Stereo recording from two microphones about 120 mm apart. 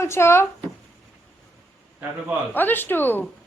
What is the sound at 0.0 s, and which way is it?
Speech, 20° left (ahead or behind).